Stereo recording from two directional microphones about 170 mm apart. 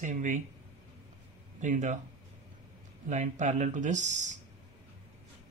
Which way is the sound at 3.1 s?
45° right (ahead or behind).